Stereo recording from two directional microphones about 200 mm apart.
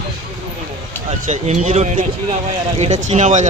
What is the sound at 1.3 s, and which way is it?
Speech, 35° right (ahead or behind).